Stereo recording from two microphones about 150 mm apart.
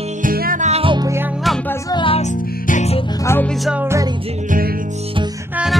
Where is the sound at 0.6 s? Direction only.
40° right (ahead or behind).